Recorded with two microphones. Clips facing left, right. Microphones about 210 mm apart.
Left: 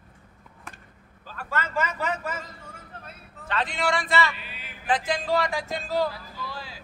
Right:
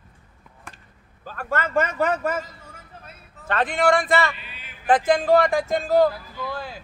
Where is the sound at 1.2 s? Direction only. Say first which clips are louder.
Right 5 dB; 50° right (ahead or behind).